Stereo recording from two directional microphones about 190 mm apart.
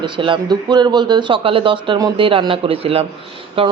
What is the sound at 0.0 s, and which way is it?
A man's voice, 25° right (ahead or behind).